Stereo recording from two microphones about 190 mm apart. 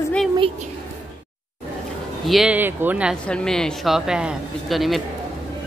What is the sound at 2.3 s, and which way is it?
Speech, 5° right (ahead or behind).